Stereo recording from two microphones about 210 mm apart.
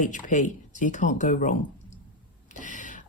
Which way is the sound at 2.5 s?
35° left (ahead or behind).